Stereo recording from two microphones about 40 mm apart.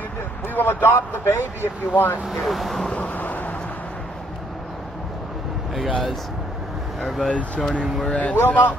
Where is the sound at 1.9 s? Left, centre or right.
Left.